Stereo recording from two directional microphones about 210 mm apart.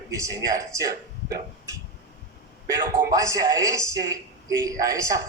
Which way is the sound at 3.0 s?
15° right (ahead or behind).